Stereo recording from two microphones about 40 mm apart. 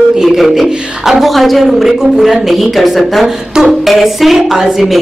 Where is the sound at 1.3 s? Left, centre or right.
Centre.